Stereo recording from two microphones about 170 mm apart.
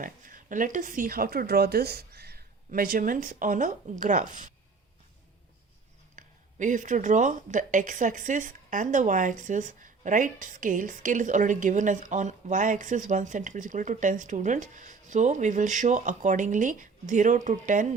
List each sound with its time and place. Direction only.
0.0 s speech: 50° right (ahead or behind)
6.1 s speech: 50° right (ahead or behind)